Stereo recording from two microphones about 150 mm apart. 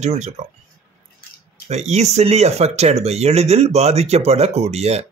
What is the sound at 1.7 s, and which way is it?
A man's voice, 50° right (ahead or behind).